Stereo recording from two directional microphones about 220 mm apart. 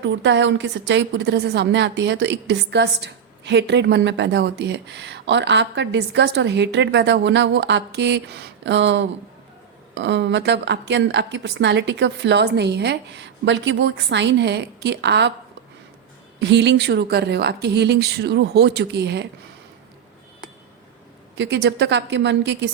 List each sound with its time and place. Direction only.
0.0 s a woman's voice: 55° right (ahead or behind)
16.4 s a woman's voice: 50° right (ahead or behind)
21.3 s a woman's voice: 50° right (ahead or behind)